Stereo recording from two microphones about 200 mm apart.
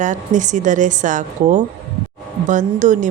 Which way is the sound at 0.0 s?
40° right (ahead or behind).